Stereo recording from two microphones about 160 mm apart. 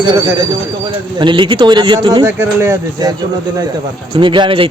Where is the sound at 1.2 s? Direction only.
30° right (ahead or behind).